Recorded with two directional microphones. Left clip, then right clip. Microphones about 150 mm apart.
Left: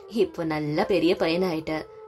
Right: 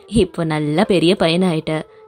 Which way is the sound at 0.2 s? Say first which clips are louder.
Right 6 dB; 35° right (ahead or behind).